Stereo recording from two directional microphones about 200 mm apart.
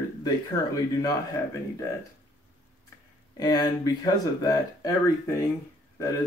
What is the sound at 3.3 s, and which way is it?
Speech, 20° left (ahead or behind).